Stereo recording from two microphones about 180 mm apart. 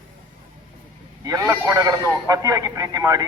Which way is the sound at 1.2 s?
20° right (ahead or behind).